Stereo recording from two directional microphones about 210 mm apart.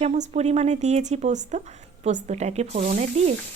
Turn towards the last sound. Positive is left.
turn(degrees=-35)  # may be behind; listen again after turning